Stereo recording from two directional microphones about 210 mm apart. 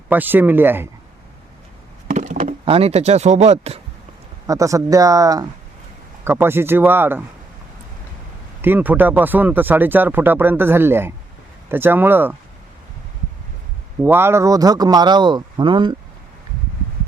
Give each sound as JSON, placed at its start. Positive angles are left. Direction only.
{"t": 0.1, "sound": "speech", "side_deg": -10}
{"t": 2.0, "sound": "a sound", "side_deg": -35}
{"t": 2.6, "sound": "speech", "side_deg": -30}
{"t": 4.4, "sound": "speech", "side_deg": -15}
{"t": 8.6, "sound": "speech", "side_deg": -10}
{"t": 14.0, "sound": "speech", "side_deg": -10}